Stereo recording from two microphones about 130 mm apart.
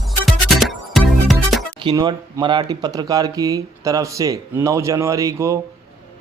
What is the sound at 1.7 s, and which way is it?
Speech, 35° right (ahead or behind).